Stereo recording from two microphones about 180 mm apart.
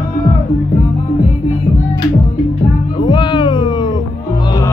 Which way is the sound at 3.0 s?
25° left (ahead or behind).